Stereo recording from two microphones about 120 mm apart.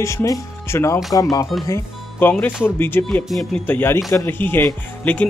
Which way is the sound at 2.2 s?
15° left (ahead or behind).